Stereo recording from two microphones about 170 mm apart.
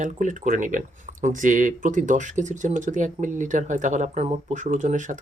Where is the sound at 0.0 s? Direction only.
45° right (ahead or behind).